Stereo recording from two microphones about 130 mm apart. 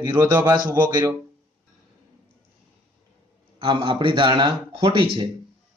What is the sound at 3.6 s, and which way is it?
A man's voice, 40° right (ahead or behind).